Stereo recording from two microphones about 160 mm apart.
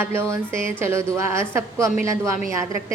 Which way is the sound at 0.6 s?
15° right (ahead or behind).